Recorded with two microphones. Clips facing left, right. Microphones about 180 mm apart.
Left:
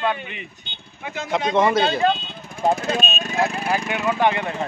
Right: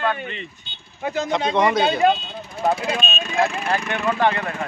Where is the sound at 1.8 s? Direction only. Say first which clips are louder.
Right 2 dB; 10° right (ahead or behind).